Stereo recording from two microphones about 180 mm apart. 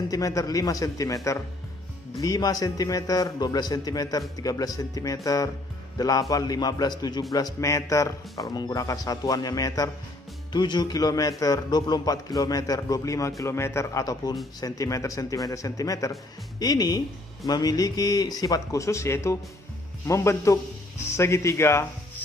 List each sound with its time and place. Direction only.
0.1 s a man's voice: 20° left (ahead or behind)